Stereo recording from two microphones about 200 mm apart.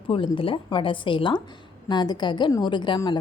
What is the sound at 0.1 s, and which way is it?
A woman's voice, 25° left (ahead or behind).